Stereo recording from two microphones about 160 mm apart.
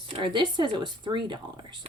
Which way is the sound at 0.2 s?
30° right (ahead or behind).